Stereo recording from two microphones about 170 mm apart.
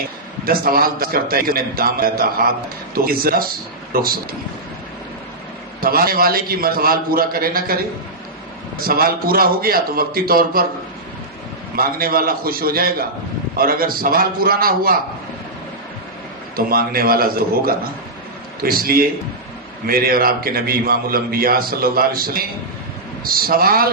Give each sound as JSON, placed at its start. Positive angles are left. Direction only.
{"t": 0.4, "sound": "a man's voice", "side_deg": -60}
{"t": 5.8, "sound": "a man's voice", "side_deg": -60}
{"t": 8.8, "sound": "a man's voice", "side_deg": -60}
{"t": 11.8, "sound": "a man's voice", "side_deg": -60}
{"t": 16.6, "sound": "a man's voice", "side_deg": -60}